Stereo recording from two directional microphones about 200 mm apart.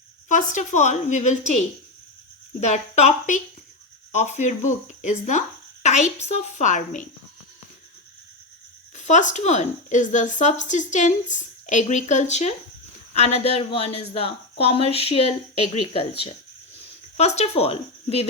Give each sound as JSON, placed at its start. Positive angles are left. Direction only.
{"t": 0.3, "sound": "a woman's voice", "side_deg": 40}
{"t": 9.0, "sound": "a woman's voice", "side_deg": 35}
{"t": 17.2, "sound": "speech", "side_deg": 35}